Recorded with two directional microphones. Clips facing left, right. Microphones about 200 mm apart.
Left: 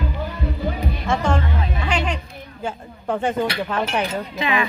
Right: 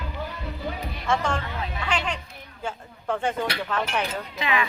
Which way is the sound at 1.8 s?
15° left (ahead or behind).